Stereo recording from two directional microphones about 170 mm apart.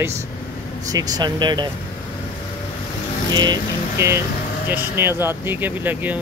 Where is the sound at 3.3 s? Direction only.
25° right (ahead or behind).